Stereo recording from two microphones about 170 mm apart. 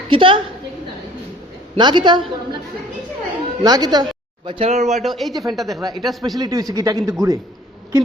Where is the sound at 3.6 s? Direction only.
25° right (ahead or behind); by 5.0 s 40° right (ahead or behind).